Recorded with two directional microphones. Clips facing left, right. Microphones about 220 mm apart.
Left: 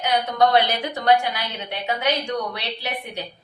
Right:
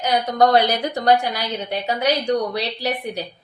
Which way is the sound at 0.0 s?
40° right (ahead or behind).